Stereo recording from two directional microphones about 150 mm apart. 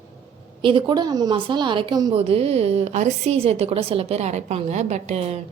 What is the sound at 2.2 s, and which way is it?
A woman's voice, 40° right (ahead or behind).